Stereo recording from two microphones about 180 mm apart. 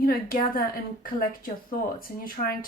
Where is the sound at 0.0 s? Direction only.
55° left (ahead or behind).